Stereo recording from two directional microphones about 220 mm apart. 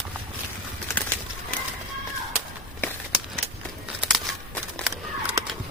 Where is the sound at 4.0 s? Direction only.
Centre (ahead or behind).